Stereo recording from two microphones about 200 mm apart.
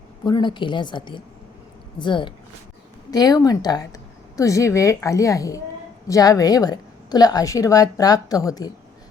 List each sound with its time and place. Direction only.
0.3 s a woman's voice: 20° left (ahead or behind)